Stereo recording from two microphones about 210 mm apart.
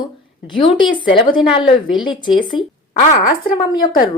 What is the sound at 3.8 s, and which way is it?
Speech, 40° left (ahead or behind).